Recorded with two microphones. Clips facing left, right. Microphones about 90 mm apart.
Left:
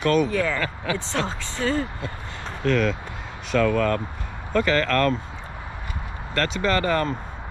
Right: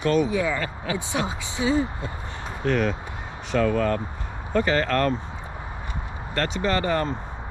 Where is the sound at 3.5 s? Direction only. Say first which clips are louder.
Left 1 dB; 70° left (ahead or behind).